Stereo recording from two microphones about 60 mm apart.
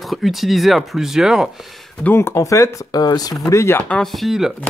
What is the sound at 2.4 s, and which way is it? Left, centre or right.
Speech, left.